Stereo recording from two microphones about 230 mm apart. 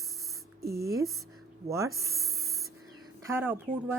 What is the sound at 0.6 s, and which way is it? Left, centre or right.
Speech, right.